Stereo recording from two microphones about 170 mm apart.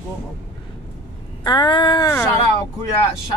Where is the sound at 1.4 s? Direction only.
30° left (ahead or behind).